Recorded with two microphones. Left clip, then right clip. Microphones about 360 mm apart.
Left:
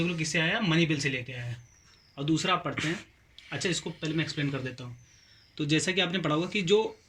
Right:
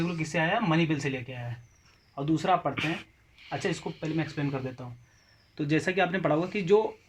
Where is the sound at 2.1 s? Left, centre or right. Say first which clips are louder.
Right 2 dB; centre.